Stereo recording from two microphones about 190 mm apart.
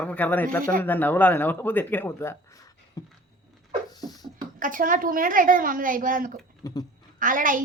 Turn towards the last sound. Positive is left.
turn(degrees=-45)  # may be behind; listen again after turning